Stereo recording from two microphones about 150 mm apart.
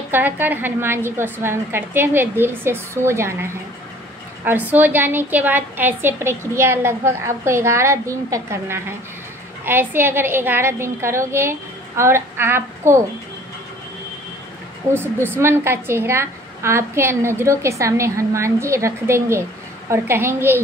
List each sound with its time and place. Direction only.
0.1 s a woman's voice: 10° right (ahead or behind)
4.5 s a woman's voice: 10° right (ahead or behind)
15.0 s a woman's voice: 15° right (ahead or behind)